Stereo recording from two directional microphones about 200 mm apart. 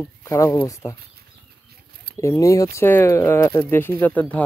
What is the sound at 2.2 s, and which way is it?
Speech, 15° left (ahead or behind).